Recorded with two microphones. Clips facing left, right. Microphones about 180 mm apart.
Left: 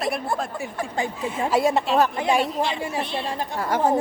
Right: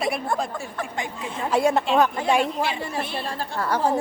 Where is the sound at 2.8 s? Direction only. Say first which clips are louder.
Left 2 dB; 15° left (ahead or behind).